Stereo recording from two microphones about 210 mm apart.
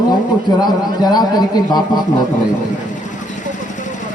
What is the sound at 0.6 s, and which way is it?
A man's voice, 20° left (ahead or behind).